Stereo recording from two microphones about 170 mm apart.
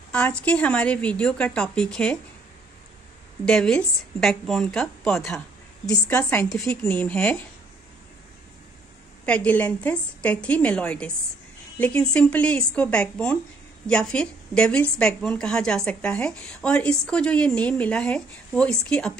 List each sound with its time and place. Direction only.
0.1 s a woman's voice: 5° left (ahead or behind)
3.4 s a woman's voice: 5° left (ahead or behind)
9.2 s a woman's voice: 5° left (ahead or behind)